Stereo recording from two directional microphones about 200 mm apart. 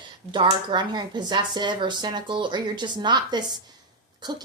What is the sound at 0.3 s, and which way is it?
A woman's voice, 25° right (ahead or behind).